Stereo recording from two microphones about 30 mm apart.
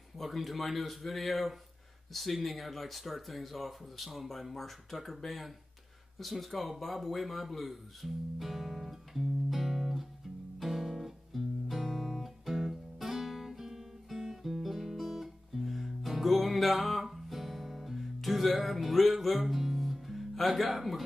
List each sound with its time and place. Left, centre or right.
0.2 s speech: centre
10.6 s music: centre